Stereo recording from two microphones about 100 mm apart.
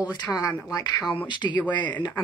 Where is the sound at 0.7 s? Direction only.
35° left (ahead or behind).